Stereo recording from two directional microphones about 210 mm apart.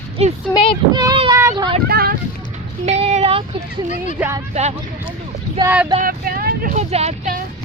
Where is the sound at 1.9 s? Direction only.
45° right (ahead or behind).